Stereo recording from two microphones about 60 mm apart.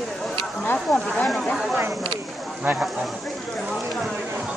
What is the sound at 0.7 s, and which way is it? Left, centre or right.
Speech, centre.